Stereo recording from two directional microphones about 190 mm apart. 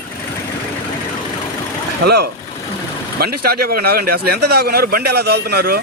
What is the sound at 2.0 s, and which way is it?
Speech, 60° right (ahead or behind).